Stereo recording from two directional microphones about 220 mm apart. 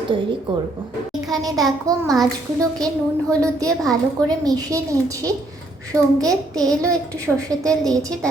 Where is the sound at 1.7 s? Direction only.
15° right (ahead or behind).